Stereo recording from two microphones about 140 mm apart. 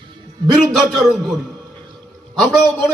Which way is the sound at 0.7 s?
Centre (ahead or behind).